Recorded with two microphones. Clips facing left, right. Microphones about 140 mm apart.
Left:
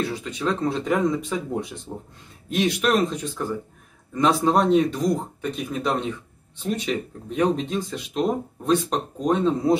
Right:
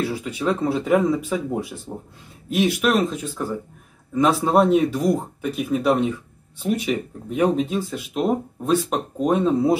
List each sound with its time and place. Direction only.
0.0 s speech: 10° right (ahead or behind)